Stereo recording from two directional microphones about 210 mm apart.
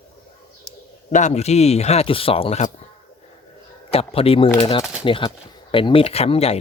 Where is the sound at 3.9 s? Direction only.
25° left (ahead or behind).